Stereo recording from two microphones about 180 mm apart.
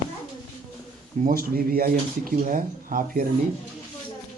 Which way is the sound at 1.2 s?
55° right (ahead or behind).